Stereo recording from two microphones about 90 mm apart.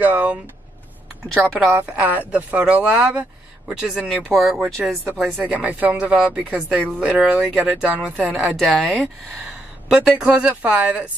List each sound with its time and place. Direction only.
0.0 s a sound: 20° right (ahead or behind)
1.7 s a woman's voice: 20° right (ahead or behind); by 5.2 s centre (ahead or behind)
5.5 s speech: 15° right (ahead or behind)
8.5 s speech: 5° left (ahead or behind); by 11.1 s 15° right (ahead or behind)